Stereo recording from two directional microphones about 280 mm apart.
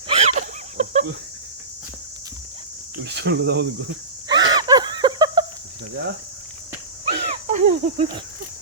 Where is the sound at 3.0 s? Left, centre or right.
Right.